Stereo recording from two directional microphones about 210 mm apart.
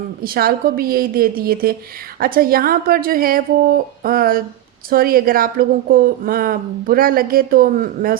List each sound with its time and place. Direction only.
0.2 s speech: 45° right (ahead or behind)